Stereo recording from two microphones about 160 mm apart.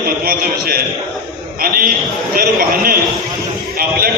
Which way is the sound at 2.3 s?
65° right (ahead or behind).